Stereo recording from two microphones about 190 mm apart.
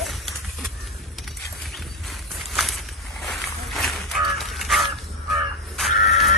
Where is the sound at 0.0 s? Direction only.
Centre (ahead or behind).